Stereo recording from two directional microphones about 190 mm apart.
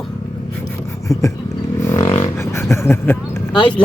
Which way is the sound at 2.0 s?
30° left (ahead or behind).